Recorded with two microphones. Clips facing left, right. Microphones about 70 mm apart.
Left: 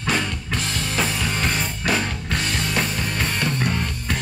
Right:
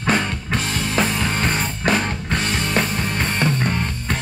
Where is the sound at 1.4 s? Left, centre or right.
Right.